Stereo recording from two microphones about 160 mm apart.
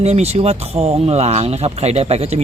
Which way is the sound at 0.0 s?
40° right (ahead or behind).